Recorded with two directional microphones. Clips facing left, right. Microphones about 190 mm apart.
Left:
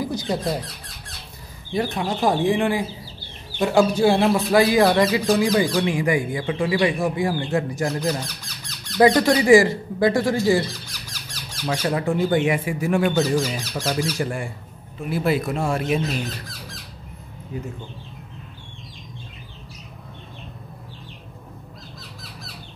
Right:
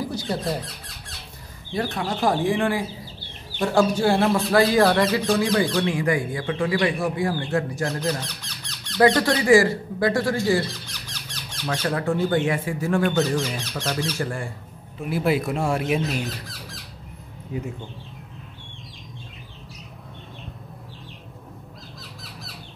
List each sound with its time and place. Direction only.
0.0 s speech: 20° left (ahead or behind)
1.7 s speech: 15° left (ahead or behind)
11.6 s speech: 15° left (ahead or behind)
15.0 s speech: 10° right (ahead or behind)
22.2 s squawk: centre (ahead or behind)